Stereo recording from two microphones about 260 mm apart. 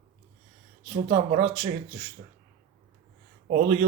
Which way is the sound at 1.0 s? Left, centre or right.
Right.